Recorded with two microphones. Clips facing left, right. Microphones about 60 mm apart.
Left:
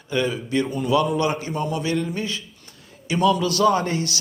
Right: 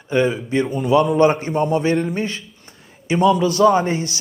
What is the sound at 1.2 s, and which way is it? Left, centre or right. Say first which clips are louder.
A man's voice: right 8 dB; right.